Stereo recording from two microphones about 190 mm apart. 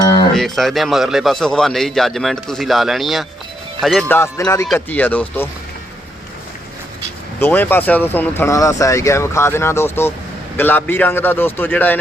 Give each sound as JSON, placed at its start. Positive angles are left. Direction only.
{"t": 0.0, "sound": "a sound", "side_deg": 20}
{"t": 0.3, "sound": "a man's voice", "side_deg": 0}
{"t": 4.1, "sound": "speech", "side_deg": 15}
{"t": 7.3, "sound": "speech", "side_deg": 10}